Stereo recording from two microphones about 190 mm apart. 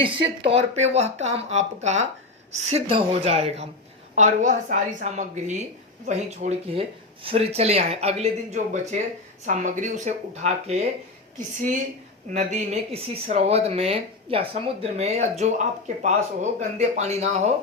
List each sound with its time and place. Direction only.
0.0 s speech: 30° right (ahead or behind)